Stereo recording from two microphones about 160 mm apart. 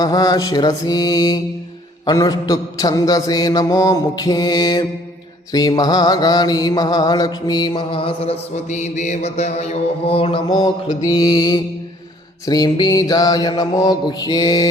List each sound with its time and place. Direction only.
0.0 s mantra: 25° left (ahead or behind)